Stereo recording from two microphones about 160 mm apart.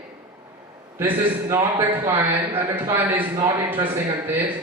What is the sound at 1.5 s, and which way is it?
Speech, 15° right (ahead or behind).